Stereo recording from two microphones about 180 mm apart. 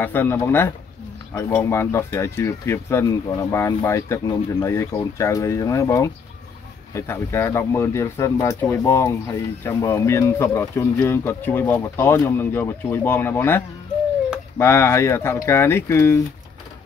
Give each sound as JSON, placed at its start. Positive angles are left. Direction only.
{"t": 0.0, "sound": "speech", "side_deg": 10}